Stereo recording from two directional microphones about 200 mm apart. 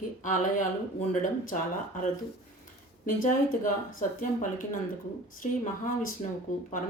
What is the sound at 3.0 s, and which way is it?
Speech, 45° left (ahead or behind).